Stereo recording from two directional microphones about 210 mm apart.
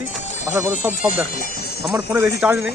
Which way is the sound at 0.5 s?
10° right (ahead or behind).